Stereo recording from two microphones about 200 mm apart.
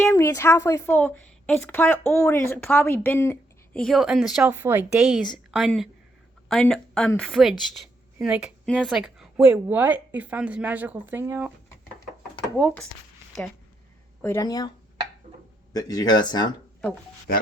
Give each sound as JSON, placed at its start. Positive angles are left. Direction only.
{"t": 0.0, "sound": "a woman's voice", "side_deg": 15}
{"t": 4.5, "sound": "a woman's voice", "side_deg": -10}
{"t": 7.6, "sound": "a sound", "side_deg": 0}
{"t": 8.7, "sound": "a woman's voice", "side_deg": 0}
{"t": 12.5, "sound": "a woman's voice", "side_deg": 5}
{"t": 14.2, "sound": "a woman's voice", "side_deg": 15}
{"t": 15.7, "sound": "speech", "side_deg": 20}